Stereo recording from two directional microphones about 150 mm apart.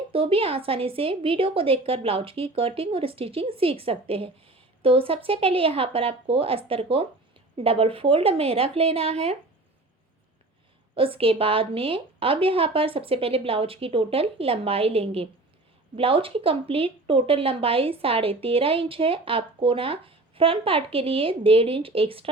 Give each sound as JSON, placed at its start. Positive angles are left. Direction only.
{"t": 0.1, "sound": "speech", "side_deg": -35}
{"t": 10.9, "sound": "speech", "side_deg": -35}